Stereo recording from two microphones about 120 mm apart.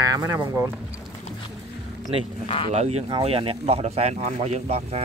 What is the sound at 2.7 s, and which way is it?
Speech, 60° right (ahead or behind).